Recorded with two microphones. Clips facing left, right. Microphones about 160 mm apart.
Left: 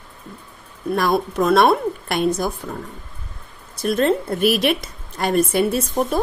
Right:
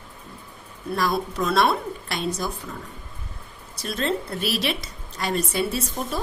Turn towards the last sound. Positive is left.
turn(degrees=55)  # may be behind; listen again after turning